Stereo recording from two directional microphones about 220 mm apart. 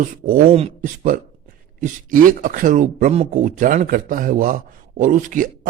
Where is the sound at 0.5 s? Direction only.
30° right (ahead or behind).